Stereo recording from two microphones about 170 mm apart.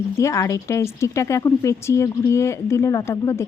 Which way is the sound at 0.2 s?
15° left (ahead or behind).